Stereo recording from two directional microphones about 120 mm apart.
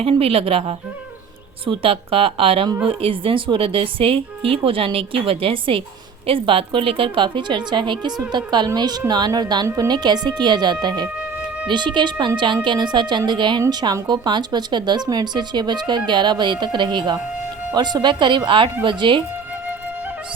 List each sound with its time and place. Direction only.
0.0 s a woman's voice: 50° right (ahead or behind)